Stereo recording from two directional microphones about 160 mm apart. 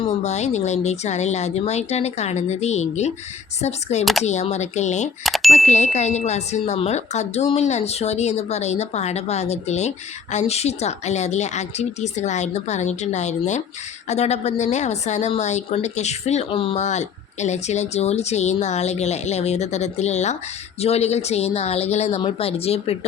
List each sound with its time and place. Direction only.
0.0 s a woman's voice: 45° left (ahead or behind)
5.2 s bicycle bell: centre (ahead or behind)
5.5 s a woman's voice: 45° left (ahead or behind)